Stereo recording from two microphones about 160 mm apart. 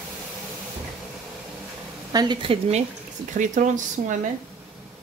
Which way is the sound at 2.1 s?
25° right (ahead or behind).